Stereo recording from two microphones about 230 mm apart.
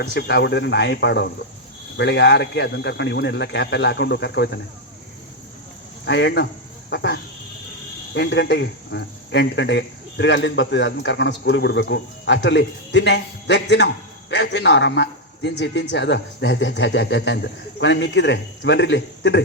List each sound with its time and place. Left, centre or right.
0.0 s speech: left
6.1 s speech: left